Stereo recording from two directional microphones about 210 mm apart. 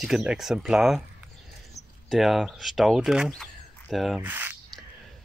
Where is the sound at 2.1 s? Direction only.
Centre (ahead or behind).